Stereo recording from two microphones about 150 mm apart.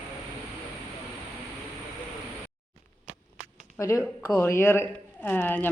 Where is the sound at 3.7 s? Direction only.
20° left (ahead or behind).